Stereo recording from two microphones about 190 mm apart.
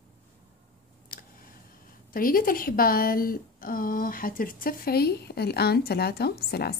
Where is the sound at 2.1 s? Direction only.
50° left (ahead or behind).